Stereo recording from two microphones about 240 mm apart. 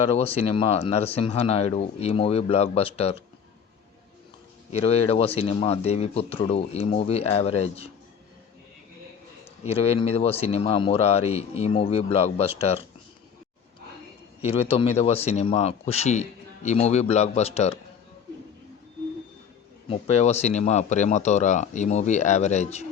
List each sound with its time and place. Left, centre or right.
0.3 s speech: left
4.7 s speech: left
9.6 s speech: left
14.4 s speech: left
19.9 s speech: left